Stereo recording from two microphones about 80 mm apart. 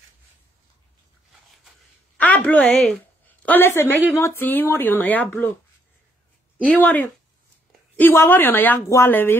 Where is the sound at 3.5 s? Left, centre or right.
Left.